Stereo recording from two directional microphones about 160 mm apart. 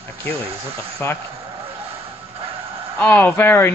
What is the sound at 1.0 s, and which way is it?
Speech, 15° left (ahead or behind).